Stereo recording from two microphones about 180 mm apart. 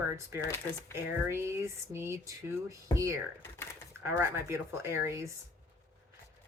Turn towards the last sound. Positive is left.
turn(degrees=-15)  # may be behind; listen again after turning